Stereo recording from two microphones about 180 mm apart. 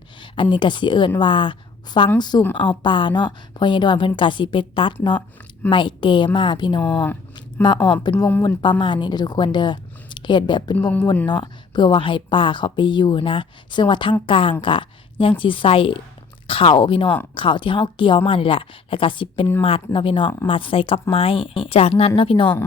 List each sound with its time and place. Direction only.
0.5 s a woman's voice: 25° left (ahead or behind)
6.8 s speech: 5° left (ahead or behind)
7.3 s a sound: 25° left (ahead or behind)
7.8 s speech: 10° left (ahead or behind)
8.4 s speech: 25° left (ahead or behind)
10.8 s speech: 10° left (ahead or behind)
11.3 s a woman's voice: 25° left (ahead or behind)